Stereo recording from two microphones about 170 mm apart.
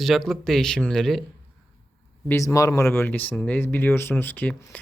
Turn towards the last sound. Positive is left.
turn(degrees=10)  # may be behind; listen again after turning